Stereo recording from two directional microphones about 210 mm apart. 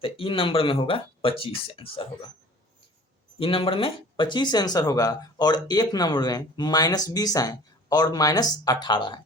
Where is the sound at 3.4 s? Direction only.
25° left (ahead or behind).